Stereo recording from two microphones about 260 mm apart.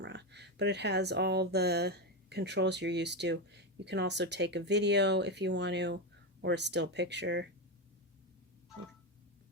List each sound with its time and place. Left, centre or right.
0.0 s speech: right